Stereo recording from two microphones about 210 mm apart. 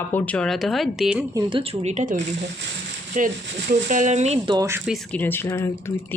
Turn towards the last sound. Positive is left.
turn(degrees=10)  # may be behind; listen again after turning